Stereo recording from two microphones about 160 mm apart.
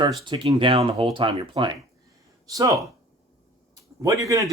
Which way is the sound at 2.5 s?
20° right (ahead or behind).